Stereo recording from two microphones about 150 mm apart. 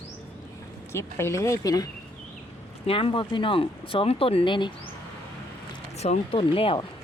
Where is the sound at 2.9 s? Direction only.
35° left (ahead or behind).